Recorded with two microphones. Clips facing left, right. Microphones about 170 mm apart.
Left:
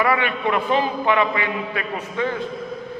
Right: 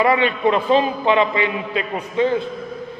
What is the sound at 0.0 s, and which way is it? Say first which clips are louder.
A man's voice: right 4 dB; 25° right (ahead or behind).